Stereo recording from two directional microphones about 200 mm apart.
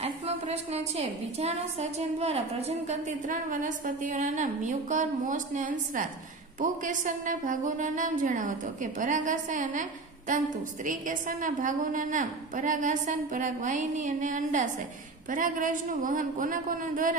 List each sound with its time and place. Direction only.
0.0 s a woman's voice: 30° right (ahead or behind)